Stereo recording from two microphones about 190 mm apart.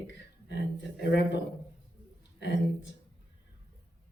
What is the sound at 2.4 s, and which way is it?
Speech, 70° left (ahead or behind).